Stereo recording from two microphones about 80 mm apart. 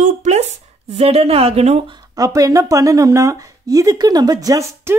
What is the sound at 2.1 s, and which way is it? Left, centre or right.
Speech, right.